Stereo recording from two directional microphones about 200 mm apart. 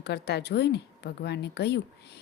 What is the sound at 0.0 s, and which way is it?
Speech, 55° left (ahead or behind).